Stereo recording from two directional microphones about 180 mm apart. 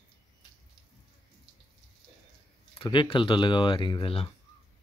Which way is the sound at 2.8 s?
30° left (ahead or behind).